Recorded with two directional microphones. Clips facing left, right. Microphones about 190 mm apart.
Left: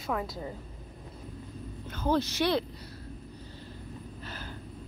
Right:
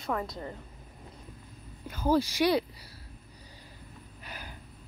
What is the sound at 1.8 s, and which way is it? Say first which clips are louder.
Speech: right 2 dB; 10° right (ahead or behind).